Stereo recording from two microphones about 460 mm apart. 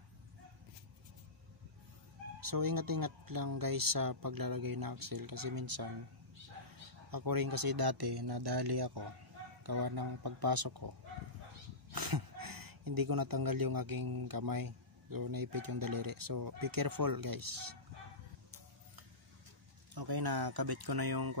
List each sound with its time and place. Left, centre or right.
2.4 s speech: right
7.1 s speech: right
11.9 s speech: right
19.9 s speech: right